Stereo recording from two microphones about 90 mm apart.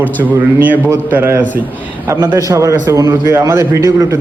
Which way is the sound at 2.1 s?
40° right (ahead or behind).